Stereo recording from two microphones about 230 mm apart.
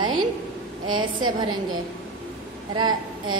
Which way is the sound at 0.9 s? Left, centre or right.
Right.